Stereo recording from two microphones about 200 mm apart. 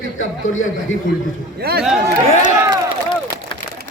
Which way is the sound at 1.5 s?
50° right (ahead or behind).